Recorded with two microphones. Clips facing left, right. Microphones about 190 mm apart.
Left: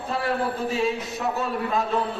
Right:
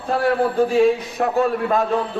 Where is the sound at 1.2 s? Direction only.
55° right (ahead or behind).